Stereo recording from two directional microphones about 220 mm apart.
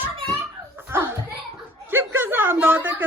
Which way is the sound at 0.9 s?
10° right (ahead or behind).